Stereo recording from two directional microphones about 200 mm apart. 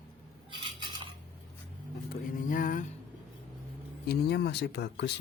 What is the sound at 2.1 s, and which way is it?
Music, 45° left (ahead or behind).